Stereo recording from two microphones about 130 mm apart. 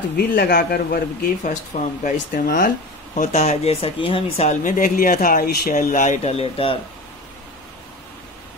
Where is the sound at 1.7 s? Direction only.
60° left (ahead or behind).